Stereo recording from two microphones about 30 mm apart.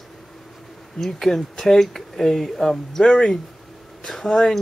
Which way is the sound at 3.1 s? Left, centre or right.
Left.